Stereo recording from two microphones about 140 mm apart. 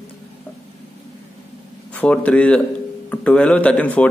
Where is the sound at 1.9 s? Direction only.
10° left (ahead or behind).